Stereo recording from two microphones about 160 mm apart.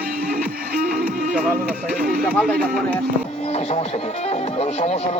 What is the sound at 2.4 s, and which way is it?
Speech, 5° left (ahead or behind).